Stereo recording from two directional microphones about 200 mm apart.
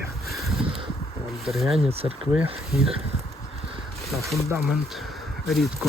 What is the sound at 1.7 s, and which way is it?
Speech, 30° right (ahead or behind).